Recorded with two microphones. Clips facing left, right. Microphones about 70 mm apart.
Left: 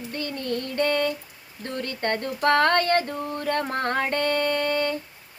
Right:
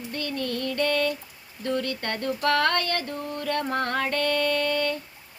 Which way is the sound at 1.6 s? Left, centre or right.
Left.